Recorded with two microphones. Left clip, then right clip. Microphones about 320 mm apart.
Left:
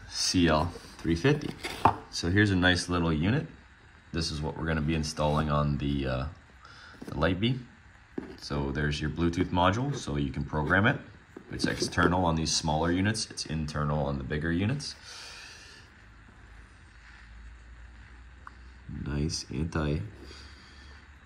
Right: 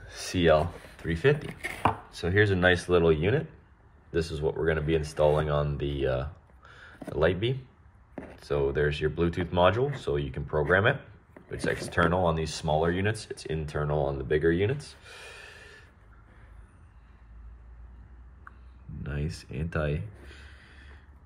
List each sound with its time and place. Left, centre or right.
0.1 s speech: centre
19.0 s speech: centre